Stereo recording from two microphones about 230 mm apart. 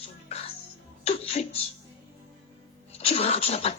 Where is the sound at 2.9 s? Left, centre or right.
Left.